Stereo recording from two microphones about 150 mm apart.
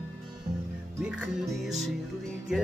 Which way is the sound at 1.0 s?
10° right (ahead or behind).